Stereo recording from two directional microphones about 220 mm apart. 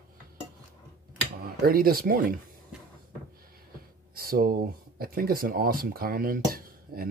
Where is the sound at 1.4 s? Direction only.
40° right (ahead or behind).